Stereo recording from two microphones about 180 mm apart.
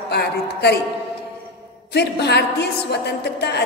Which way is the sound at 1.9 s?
65° left (ahead or behind).